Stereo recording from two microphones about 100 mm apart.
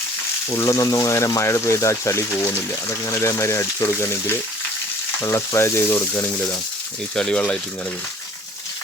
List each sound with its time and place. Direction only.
0.5 s speech: 30° left (ahead or behind)
7.2 s speech: 10° left (ahead or behind)